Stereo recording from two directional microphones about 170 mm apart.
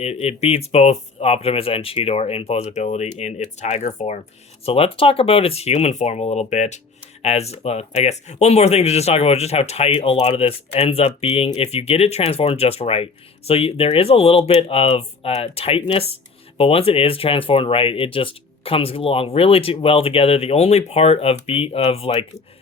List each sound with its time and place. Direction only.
0.0 s speech: 35° left (ahead or behind)